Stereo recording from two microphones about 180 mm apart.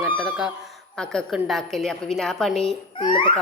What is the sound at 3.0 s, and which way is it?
Speech, 30° left (ahead or behind).